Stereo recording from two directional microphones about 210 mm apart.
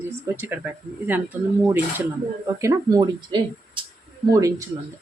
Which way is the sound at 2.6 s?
20° right (ahead or behind).